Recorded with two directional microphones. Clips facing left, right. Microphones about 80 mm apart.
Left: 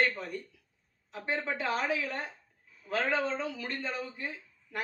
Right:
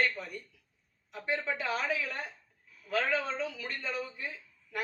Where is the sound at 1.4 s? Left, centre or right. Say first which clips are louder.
Left 3 dB; left.